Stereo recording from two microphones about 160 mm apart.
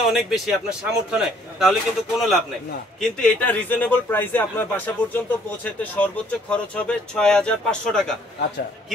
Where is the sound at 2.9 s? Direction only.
5° left (ahead or behind).